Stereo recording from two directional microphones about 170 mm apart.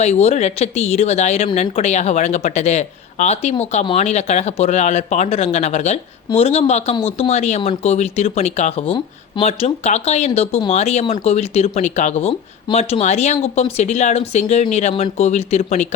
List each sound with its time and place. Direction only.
0.0 s speech: 40° left (ahead or behind)